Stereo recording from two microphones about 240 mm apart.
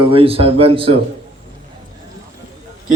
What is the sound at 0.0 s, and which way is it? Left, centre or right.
Speech, right.